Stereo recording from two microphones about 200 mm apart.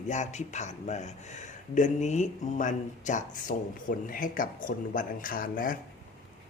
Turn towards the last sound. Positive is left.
turn(degrees=45)  # may be behind; listen again after turning